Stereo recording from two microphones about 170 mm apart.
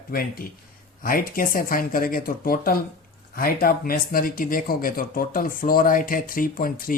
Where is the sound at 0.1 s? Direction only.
60° left (ahead or behind).